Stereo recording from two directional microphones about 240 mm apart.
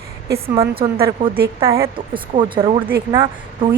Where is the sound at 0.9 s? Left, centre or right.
Centre.